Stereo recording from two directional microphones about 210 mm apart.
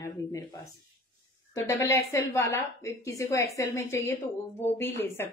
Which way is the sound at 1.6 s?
15° left (ahead or behind).